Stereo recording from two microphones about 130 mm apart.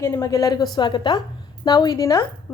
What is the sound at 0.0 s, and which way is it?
A woman's voice, 25° left (ahead or behind).